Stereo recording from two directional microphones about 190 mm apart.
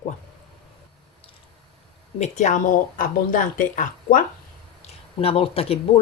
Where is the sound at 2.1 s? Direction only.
35° left (ahead or behind).